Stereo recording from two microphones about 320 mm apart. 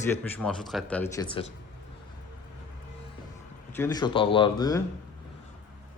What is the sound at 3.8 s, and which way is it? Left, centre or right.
Speech, centre.